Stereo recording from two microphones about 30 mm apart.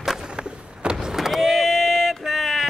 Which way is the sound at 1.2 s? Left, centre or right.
Centre.